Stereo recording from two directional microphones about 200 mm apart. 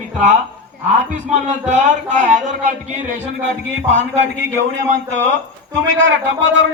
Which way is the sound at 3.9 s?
65° right (ahead or behind).